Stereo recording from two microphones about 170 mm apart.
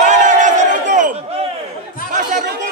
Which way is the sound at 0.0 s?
45° right (ahead or behind).